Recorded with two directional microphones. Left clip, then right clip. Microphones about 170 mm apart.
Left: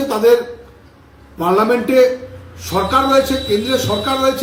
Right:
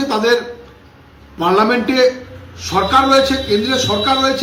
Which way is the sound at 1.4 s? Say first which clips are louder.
Right 1 dB; 15° left (ahead or behind).